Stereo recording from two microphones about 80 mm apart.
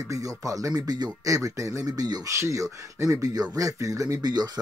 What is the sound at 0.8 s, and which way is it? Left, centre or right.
Speech, right.